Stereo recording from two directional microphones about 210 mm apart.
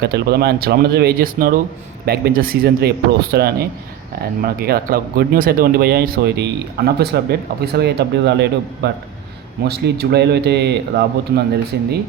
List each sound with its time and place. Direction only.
0.0 s speech: 50° right (ahead or behind)